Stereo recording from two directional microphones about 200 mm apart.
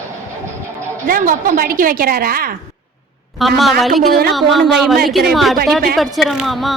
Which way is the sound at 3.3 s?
Centre (ahead or behind).